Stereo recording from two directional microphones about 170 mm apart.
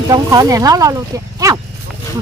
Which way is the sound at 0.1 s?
20° right (ahead or behind).